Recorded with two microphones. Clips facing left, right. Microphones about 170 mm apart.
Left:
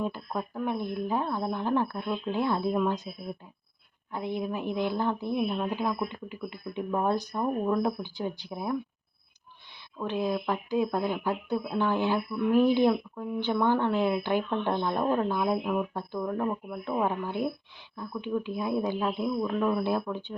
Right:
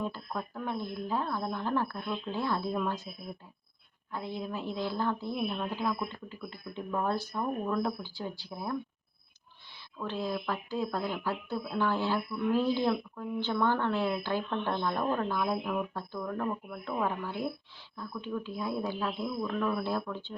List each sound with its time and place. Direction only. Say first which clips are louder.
0.0 s speech: left 4 dB; 15° left (ahead or behind)
4.1 s speech: left 5 dB; 15° left (ahead or behind)
10.0 s speech: left 5 dB; 15° left (ahead or behind)